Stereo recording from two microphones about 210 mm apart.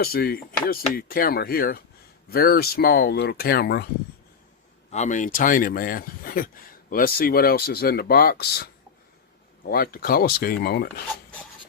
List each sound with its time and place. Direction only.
0.0 s speech: 45° left (ahead or behind)
4.9 s speech: 35° left (ahead or behind); by 11.0 s 50° left (ahead or behind)